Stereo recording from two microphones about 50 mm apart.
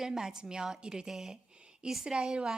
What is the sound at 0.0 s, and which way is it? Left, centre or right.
A woman's voice, centre.